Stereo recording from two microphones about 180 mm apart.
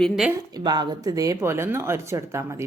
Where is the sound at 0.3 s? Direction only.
20° right (ahead or behind).